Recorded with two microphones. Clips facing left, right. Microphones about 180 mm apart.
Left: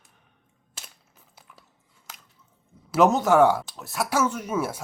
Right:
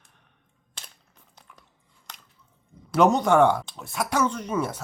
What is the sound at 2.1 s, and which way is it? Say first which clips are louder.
Chewing: even; 5° left (ahead or behind).